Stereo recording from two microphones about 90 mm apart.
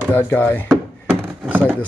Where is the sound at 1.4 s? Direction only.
20° right (ahead or behind).